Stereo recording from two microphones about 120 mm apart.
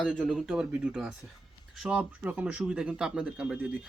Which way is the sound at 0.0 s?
5° left (ahead or behind).